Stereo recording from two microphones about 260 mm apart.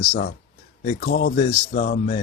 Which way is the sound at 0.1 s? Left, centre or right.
Left.